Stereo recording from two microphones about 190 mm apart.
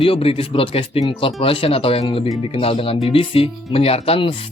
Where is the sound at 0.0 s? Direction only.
30° left (ahead or behind).